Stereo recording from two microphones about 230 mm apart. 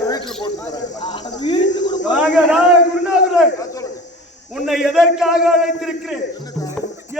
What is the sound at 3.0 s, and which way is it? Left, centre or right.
Speech, centre.